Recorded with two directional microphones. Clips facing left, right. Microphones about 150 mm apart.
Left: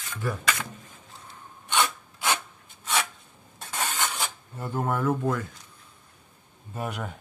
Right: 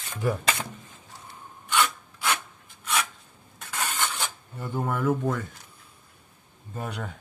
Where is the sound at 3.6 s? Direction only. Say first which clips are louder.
Even; 25° left (ahead or behind).